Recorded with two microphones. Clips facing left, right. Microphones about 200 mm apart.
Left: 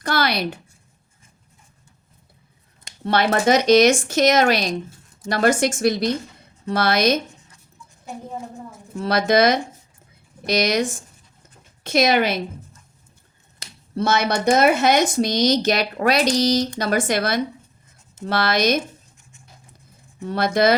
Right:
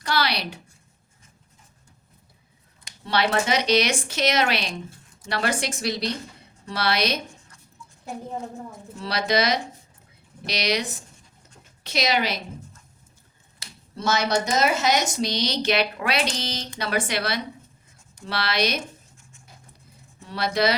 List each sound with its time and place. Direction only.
0.0 s a sound: 50° left (ahead or behind)
3.0 s speech: 50° left (ahead or behind)
9.0 s speech: 50° left (ahead or behind)
13.9 s speech: 60° left (ahead or behind)
20.2 s speech: 50° left (ahead or behind)